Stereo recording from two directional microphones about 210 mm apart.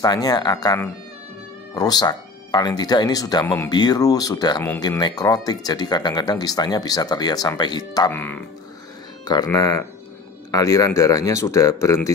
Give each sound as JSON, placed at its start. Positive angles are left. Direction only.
{"t": 0.0, "sound": "speech", "side_deg": 20}
{"t": 8.1, "sound": "speech", "side_deg": 10}